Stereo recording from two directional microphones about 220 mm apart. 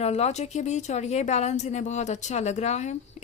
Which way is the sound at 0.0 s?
30° left (ahead or behind).